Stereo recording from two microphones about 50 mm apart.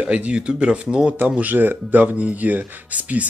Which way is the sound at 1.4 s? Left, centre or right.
Right.